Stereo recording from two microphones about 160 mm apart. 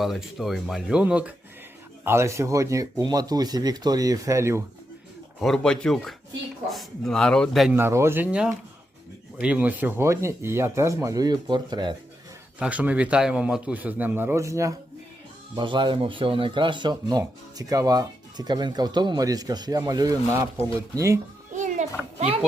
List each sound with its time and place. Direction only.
0.0 s speech: centre (ahead or behind); by 4.6 s 20° right (ahead or behind)
5.4 s a man's voice: 5° left (ahead or behind)
7.7 s speech: 15° right (ahead or behind)
12.5 s speech: 10° right (ahead or behind)
15.5 s speech: 30° right (ahead or behind)
21.5 s a sound: 50° right (ahead or behind)